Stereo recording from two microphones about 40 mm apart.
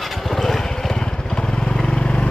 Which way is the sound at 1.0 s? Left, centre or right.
Left.